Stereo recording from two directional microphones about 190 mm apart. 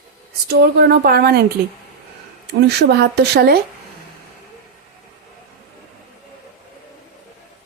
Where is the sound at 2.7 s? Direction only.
60° right (ahead or behind).